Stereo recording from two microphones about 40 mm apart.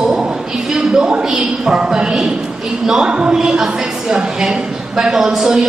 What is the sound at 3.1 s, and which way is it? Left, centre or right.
A man's voice, right.